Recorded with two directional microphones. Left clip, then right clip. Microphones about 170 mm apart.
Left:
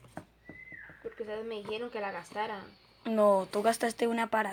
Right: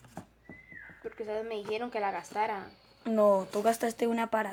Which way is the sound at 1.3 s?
40° right (ahead or behind).